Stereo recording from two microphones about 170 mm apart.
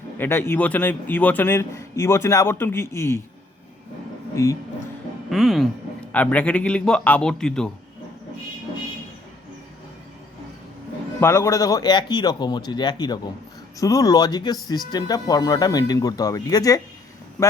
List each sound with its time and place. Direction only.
0.2 s a man's voice: 15° left (ahead or behind)
5.3 s a man's voice: centre (ahead or behind)
11.2 s speech: 15° left (ahead or behind)